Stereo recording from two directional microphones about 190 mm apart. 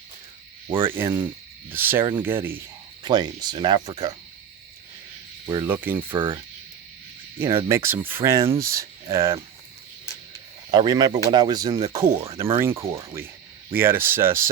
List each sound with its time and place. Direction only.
0.8 s speech: 10° right (ahead or behind)
3.0 s speech: 20° right (ahead or behind)
5.6 s speech: 10° right (ahead or behind)
7.3 s speech: 10° right (ahead or behind)
10.7 s speech: 20° right (ahead or behind)